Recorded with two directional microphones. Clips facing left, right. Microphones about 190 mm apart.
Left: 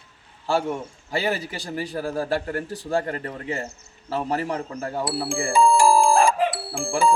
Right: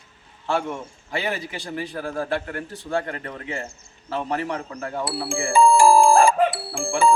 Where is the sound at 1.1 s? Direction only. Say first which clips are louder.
Left 2 dB; 35° left (ahead or behind).